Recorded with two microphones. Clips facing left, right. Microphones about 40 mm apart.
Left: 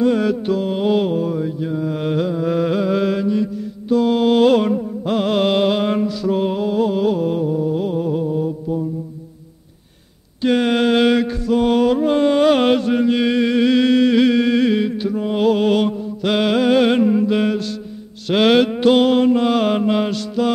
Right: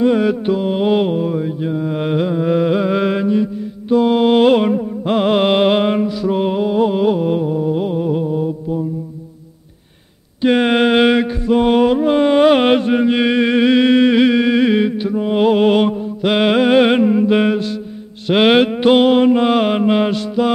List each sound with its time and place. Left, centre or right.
0.0 s mantra: right
3.9 s music: right
5.9 s mantra: centre
10.4 s mantra: right